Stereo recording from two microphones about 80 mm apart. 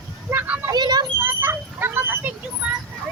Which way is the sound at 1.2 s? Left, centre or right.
Right.